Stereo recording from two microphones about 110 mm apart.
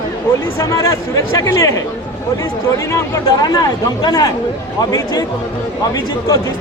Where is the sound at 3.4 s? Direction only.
40° left (ahead or behind).